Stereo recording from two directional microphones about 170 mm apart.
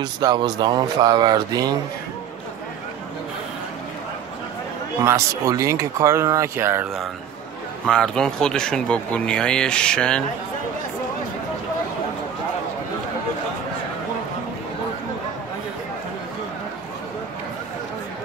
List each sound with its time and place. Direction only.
0.0 s speech: 25° right (ahead or behind)
5.0 s speech: 15° right (ahead or behind)
7.8 s speech: 5° left (ahead or behind)